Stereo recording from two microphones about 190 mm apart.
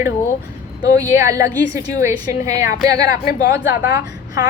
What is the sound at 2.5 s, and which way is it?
A woman's voice, 50° left (ahead or behind).